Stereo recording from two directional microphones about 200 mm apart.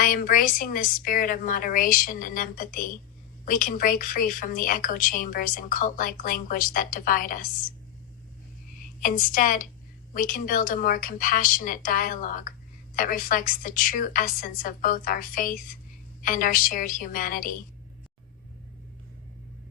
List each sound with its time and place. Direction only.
0.0 s a woman's voice: 45° left (ahead or behind)
9.0 s a woman's voice: 45° left (ahead or behind)